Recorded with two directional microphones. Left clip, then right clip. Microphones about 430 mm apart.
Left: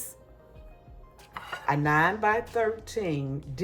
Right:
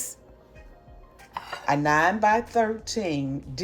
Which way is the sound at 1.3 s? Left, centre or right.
Centre.